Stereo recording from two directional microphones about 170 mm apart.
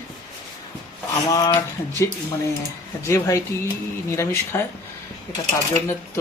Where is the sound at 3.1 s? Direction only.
20° left (ahead or behind).